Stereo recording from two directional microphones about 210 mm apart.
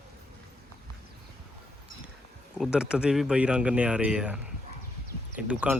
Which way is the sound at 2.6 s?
5° right (ahead or behind).